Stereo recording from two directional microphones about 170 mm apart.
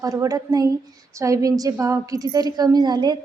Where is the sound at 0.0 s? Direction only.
20° right (ahead or behind).